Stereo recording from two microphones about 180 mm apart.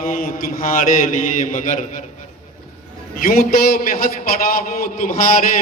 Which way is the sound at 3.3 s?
50° left (ahead or behind).